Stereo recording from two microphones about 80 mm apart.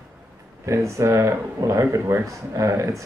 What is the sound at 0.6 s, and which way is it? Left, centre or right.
Speech, right.